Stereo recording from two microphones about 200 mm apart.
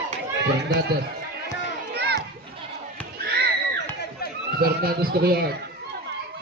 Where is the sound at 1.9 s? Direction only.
55° right (ahead or behind).